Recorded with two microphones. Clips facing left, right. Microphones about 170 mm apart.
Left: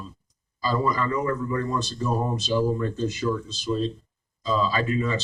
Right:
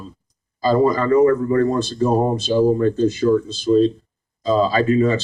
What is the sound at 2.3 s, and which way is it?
Speech, 30° right (ahead or behind).